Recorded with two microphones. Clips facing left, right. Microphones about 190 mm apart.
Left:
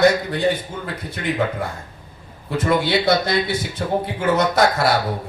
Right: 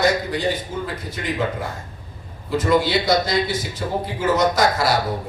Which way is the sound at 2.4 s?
60° left (ahead or behind).